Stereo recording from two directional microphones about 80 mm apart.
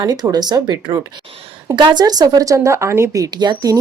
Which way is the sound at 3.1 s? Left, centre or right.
Right.